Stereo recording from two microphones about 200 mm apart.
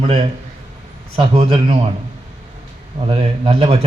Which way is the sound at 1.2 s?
30° right (ahead or behind).